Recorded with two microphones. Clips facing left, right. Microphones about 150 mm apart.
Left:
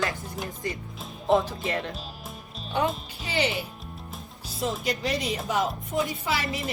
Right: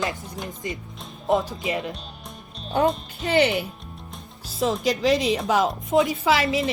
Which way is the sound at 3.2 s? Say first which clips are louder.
Right 8 dB; 55° right (ahead or behind).